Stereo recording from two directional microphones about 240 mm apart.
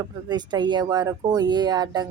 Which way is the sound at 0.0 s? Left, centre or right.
Centre.